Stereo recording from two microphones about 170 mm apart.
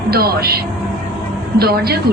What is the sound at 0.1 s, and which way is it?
A woman's voice, 65° right (ahead or behind).